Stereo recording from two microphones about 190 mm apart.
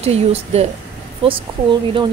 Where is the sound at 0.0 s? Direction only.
35° right (ahead or behind).